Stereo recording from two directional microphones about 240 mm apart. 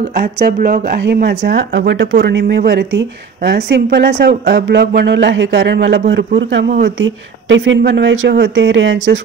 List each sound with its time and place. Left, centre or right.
0.1 s a woman's voice: right